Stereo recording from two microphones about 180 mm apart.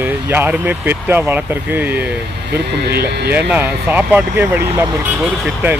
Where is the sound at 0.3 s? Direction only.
10° right (ahead or behind).